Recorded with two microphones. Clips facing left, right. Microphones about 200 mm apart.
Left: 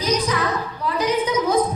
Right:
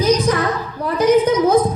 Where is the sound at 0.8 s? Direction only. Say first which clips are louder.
Right 8 dB; 50° right (ahead or behind).